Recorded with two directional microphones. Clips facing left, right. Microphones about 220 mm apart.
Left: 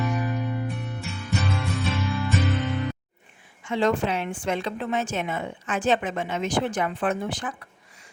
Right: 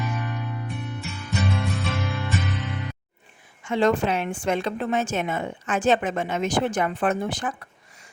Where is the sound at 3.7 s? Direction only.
50° right (ahead or behind).